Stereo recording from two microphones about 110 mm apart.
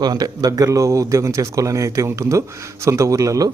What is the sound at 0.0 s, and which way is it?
Speech, 35° right (ahead or behind).